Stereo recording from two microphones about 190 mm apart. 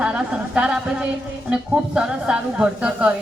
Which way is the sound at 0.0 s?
5° right (ahead or behind).